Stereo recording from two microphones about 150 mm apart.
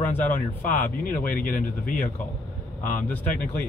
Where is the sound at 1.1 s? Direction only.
70° left (ahead or behind).